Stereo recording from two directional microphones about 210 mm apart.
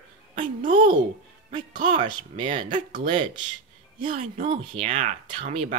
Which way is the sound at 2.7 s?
35° right (ahead or behind).